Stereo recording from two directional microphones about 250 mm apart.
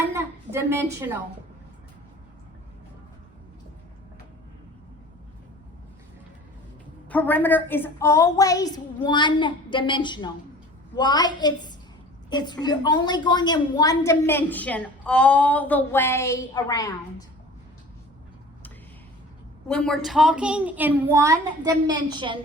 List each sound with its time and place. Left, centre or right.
0.1 s a sound: centre
7.1 s a woman's voice: centre
19.6 s a woman's voice: centre